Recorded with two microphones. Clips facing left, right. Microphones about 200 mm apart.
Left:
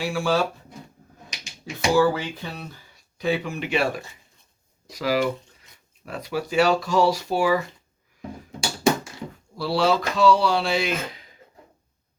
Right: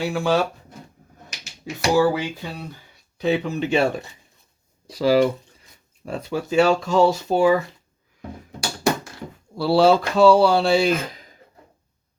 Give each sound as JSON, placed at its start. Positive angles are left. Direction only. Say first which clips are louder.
{"t": 0.0, "sound": "speech", "louder": "right 2 dB", "side_deg": -20}
{"t": 1.9, "sound": "speech", "louder": "right 1 dB", "side_deg": -15}
{"t": 9.6, "sound": "speech", "louder": "right 6 dB", "side_deg": -30}